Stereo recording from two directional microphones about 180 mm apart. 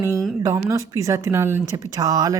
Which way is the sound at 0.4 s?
15° right (ahead or behind).